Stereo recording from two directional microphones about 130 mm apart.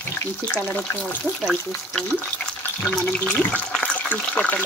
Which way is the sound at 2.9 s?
10° left (ahead or behind).